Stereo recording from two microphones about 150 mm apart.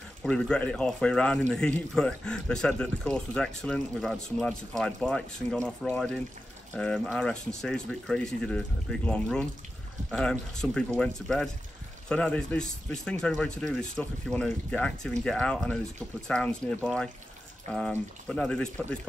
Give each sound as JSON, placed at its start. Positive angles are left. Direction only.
{"t": 0.2, "sound": "speech", "side_deg": 5}